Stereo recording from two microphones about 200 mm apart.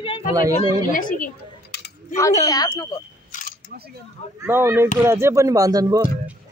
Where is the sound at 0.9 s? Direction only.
40° left (ahead or behind).